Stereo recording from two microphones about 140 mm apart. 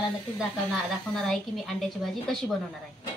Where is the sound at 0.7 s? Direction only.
Centre (ahead or behind).